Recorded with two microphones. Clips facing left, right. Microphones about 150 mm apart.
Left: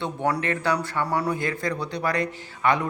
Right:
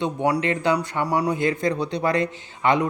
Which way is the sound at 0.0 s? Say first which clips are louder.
Right 3 dB; 15° right (ahead or behind).